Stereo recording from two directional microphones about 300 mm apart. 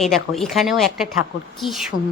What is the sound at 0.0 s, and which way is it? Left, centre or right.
Speech, centre.